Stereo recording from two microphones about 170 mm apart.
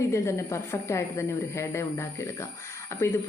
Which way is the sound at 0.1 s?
15° left (ahead or behind).